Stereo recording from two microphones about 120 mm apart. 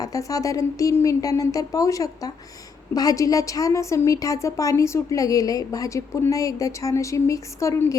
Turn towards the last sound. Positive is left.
turn(degrees=25)  # may be behind; listen again after turning